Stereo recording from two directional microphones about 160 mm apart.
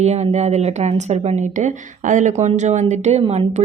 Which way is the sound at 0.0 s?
40° right (ahead or behind).